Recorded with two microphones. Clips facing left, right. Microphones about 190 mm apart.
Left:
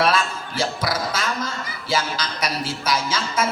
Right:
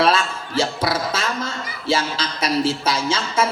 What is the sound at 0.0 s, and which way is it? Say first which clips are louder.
A man's voice: right 2 dB; 30° right (ahead or behind).